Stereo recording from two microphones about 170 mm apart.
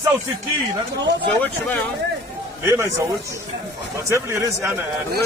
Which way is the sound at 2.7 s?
20° right (ahead or behind).